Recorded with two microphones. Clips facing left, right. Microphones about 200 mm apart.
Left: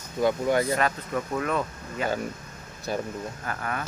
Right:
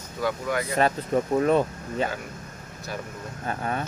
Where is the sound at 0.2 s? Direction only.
25° left (ahead or behind).